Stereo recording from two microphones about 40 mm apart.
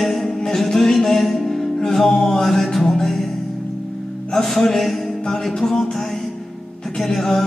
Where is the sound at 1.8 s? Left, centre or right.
Centre.